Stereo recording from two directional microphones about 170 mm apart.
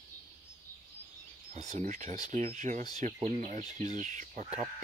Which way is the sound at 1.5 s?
40° right (ahead or behind).